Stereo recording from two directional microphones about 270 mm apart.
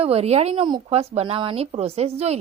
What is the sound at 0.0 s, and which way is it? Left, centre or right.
A woman's voice, right.